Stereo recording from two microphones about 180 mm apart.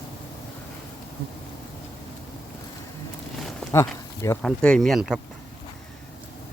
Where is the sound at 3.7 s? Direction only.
15° left (ahead or behind).